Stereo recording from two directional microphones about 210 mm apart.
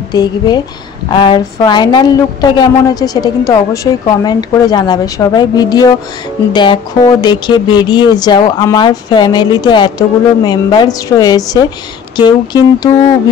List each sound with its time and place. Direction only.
0.1 s speech: 20° left (ahead or behind)